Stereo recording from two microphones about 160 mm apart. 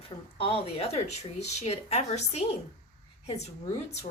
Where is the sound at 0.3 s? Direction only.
35° left (ahead or behind).